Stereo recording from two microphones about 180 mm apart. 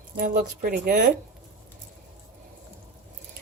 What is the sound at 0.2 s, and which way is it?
Speech, 55° right (ahead or behind).